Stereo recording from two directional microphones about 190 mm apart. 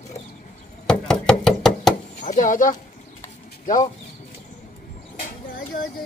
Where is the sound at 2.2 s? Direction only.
40° left (ahead or behind).